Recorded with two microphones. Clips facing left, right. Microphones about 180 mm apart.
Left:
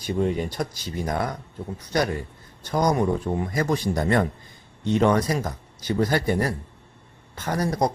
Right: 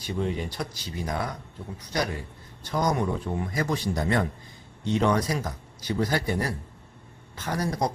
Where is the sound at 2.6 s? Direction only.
45° left (ahead or behind).